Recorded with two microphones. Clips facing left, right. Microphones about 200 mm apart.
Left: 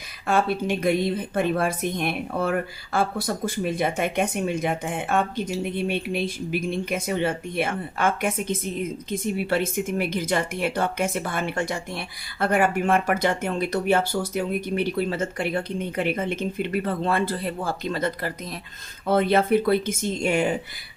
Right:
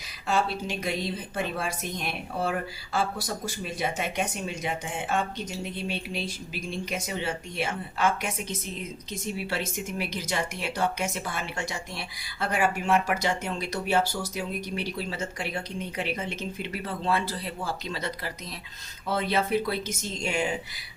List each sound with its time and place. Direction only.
0.3 s a woman's voice: 55° left (ahead or behind)